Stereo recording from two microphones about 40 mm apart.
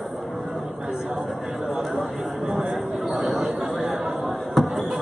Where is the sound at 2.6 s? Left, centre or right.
Centre.